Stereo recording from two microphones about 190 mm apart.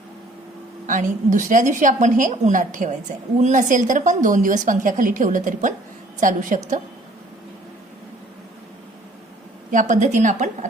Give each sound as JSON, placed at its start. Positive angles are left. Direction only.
{"t": 0.9, "sound": "a woman's voice", "side_deg": -40}
{"t": 9.7, "sound": "a woman's voice", "side_deg": -40}